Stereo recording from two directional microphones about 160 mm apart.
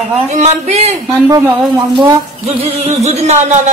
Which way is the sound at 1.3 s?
25° right (ahead or behind).